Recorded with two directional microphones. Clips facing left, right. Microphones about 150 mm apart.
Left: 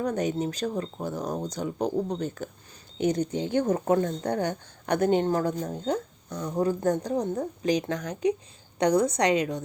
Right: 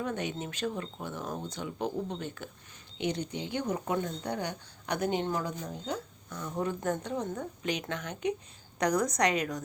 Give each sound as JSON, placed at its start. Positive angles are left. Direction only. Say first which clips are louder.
{"t": 0.0, "sound": "a woman's voice", "louder": "left 7 dB", "side_deg": 40}